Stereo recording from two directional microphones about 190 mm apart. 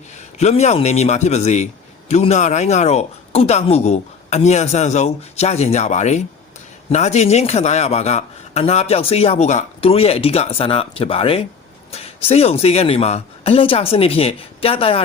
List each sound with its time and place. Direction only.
0.3 s a man's voice: 35° left (ahead or behind)